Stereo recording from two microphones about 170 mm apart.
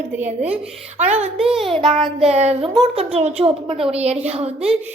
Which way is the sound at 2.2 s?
40° right (ahead or behind).